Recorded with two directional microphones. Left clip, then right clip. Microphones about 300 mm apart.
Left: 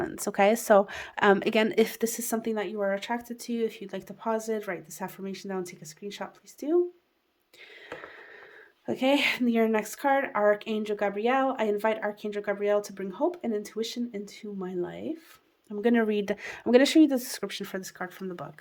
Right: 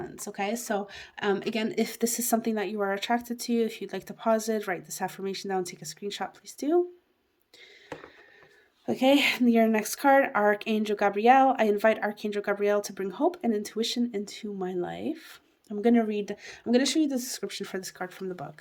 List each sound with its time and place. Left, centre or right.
0.0 s a woman's voice: centre
8.9 s a woman's voice: centre